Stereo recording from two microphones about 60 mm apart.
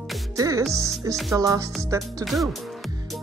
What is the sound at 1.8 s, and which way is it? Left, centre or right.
Music, right.